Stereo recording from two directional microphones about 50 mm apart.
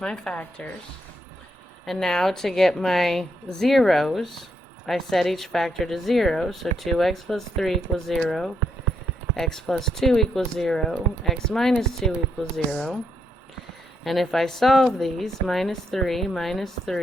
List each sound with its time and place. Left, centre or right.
0.0 s speech: centre
1.9 s speech: centre
14.0 s speech: centre